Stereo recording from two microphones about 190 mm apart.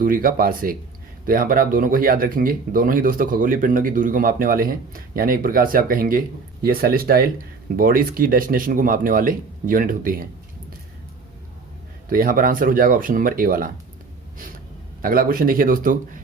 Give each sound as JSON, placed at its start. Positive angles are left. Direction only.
{"t": 0.0, "sound": "speech", "side_deg": -45}
{"t": 12.0, "sound": "speech", "side_deg": -50}
{"t": 15.0, "sound": "speech", "side_deg": -50}